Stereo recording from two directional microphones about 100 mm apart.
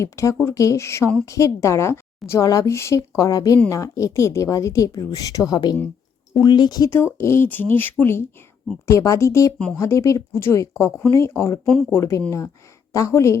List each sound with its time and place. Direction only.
0.0 s a woman's voice: 30° left (ahead or behind)
6.9 s a woman's voice: 25° left (ahead or behind)
11.6 s speech: 5° left (ahead or behind)
11.9 s a woman's voice: 30° left (ahead or behind)